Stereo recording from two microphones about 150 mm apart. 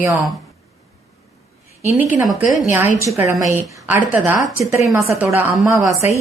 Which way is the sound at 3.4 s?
15° right (ahead or behind).